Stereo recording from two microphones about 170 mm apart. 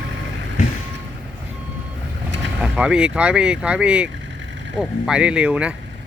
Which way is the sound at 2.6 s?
5° right (ahead or behind).